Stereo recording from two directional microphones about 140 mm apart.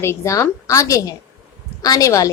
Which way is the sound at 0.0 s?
20° left (ahead or behind).